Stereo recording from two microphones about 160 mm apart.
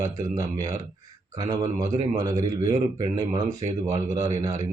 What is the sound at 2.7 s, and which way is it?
Speech, 45° right (ahead or behind).